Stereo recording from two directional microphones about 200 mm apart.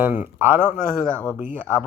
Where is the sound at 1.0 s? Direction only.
10° left (ahead or behind).